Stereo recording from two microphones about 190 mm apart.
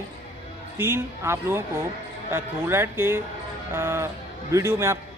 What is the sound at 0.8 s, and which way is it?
A man's voice, 15° right (ahead or behind).